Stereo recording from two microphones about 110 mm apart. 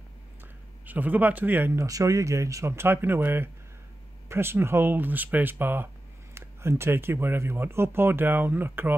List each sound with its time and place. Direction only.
0.8 s speech: 15° right (ahead or behind)
1.9 s speech: 30° right (ahead or behind)